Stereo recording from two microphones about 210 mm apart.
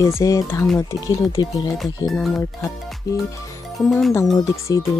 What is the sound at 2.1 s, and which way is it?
Speech, centre (ahead or behind).